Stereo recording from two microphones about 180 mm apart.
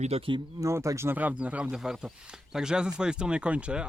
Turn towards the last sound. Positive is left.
turn(degrees=-5)  # may be behind; listen again after turning